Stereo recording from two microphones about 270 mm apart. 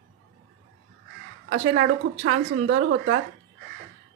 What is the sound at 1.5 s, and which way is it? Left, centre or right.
Speech, right.